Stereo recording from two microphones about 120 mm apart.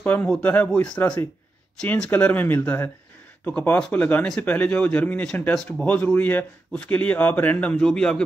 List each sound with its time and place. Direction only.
0.0 s speech: 15° left (ahead or behind)